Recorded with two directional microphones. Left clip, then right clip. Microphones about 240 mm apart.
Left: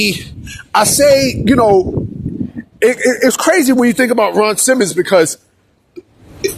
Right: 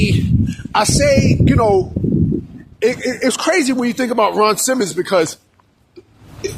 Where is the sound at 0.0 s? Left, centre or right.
Left.